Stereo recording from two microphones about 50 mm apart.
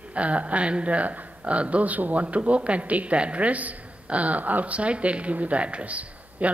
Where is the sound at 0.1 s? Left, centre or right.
Right.